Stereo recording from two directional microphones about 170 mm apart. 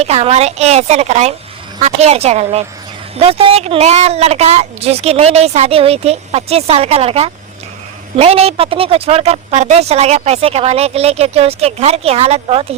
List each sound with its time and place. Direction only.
0.0 s a woman's voice: 35° right (ahead or behind)